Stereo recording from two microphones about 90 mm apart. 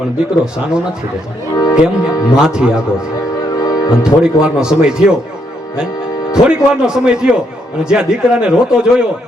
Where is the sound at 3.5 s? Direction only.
45° left (ahead or behind).